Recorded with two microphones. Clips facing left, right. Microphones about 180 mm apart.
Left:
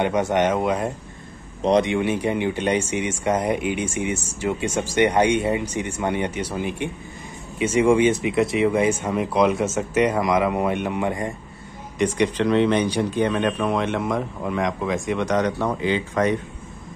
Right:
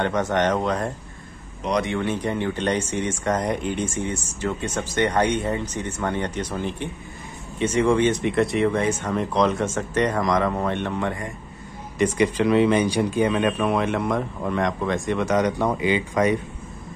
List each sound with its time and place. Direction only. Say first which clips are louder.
0.0 s speech: left 2 dB; 10° left (ahead or behind)
1.6 s speech: left 6 dB; 25° left (ahead or behind)
1.9 s speech: left 3 dB; 10° left (ahead or behind)
12.0 s speech: even; 5° right (ahead or behind)